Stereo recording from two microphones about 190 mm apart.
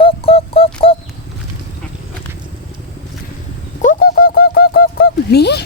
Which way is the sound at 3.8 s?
45° left (ahead or behind).